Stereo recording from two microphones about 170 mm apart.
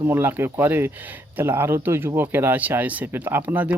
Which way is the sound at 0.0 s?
15° right (ahead or behind).